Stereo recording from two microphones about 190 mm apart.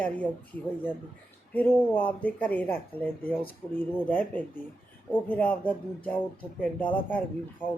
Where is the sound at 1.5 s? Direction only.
10° left (ahead or behind).